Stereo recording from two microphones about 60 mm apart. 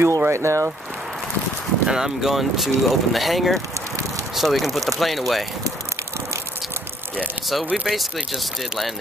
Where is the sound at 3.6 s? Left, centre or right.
Right.